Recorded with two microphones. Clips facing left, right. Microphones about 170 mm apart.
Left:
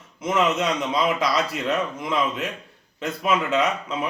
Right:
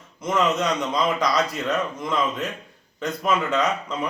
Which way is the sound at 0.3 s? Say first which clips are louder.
Even; 5° left (ahead or behind).